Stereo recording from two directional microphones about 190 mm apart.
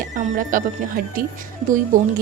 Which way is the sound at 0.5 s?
45° right (ahead or behind).